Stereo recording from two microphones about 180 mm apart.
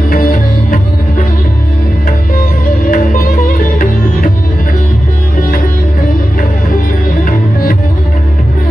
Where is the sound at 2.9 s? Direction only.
50° left (ahead or behind).